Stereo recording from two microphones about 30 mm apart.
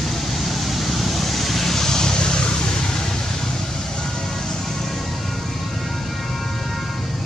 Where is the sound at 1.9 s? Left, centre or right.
Centre.